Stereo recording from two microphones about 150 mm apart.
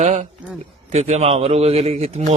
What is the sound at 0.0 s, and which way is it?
A man's voice, 50° right (ahead or behind).